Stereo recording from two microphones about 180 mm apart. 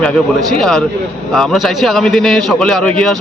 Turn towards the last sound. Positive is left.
turn(degrees=5)  # may be behind; listen again after turning